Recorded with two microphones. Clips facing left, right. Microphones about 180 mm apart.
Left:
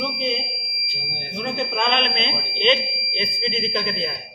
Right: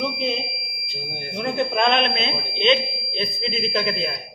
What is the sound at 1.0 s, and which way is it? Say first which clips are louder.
Smoke detector: right 2 dB; 45° right (ahead or behind).